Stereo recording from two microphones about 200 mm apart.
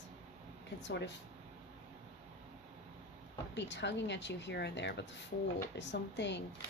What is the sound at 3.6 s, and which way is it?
Speech, 60° left (ahead or behind).